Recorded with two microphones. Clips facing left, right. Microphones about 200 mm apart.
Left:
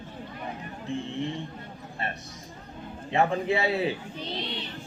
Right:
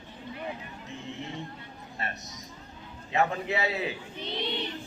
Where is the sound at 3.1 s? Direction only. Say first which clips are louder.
Left 3 dB; 30° left (ahead or behind).